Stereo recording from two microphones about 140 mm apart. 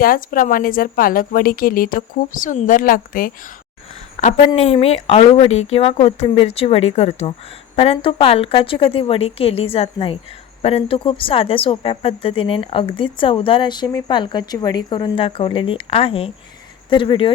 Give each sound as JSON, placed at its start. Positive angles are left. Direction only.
{"t": 0.0, "sound": "a woman's voice", "side_deg": 80}
{"t": 4.2, "sound": "a woman's voice", "side_deg": 50}
{"t": 7.8, "sound": "a woman's voice", "side_deg": 40}